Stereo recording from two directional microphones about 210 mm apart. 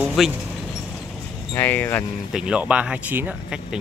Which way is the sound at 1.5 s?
10° left (ahead or behind).